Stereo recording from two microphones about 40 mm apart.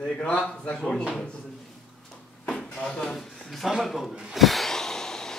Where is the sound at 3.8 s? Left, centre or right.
Centre.